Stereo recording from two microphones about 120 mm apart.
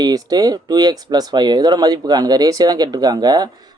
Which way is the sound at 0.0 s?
30° right (ahead or behind).